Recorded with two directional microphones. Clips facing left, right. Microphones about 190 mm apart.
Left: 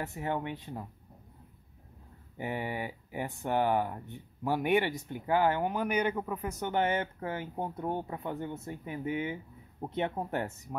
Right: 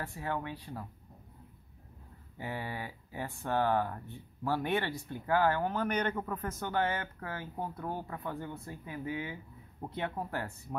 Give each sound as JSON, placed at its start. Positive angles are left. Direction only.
{"t": 0.0, "sound": "speech", "side_deg": 20}
{"t": 2.3, "sound": "speech", "side_deg": 20}